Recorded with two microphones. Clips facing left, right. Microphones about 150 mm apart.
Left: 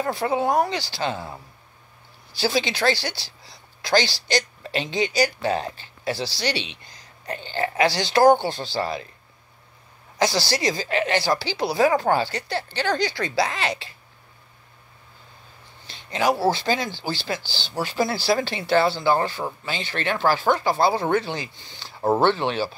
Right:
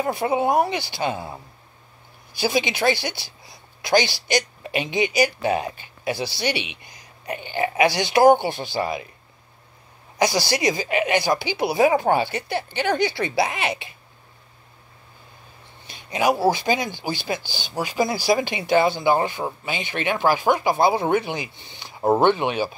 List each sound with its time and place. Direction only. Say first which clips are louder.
0.0 s speech: right 1 dB; 20° right (ahead or behind)
10.1 s speech: right 1 dB; 20° right (ahead or behind)
15.9 s speech: right 1 dB; 15° right (ahead or behind)